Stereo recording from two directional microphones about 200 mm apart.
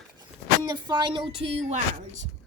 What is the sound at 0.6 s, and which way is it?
Speech, 20° right (ahead or behind).